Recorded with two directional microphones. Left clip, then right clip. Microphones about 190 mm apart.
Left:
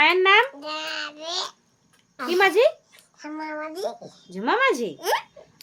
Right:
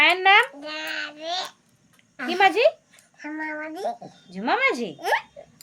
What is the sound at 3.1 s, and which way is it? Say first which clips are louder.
Speech: right 1 dB; 5° left (ahead or behind).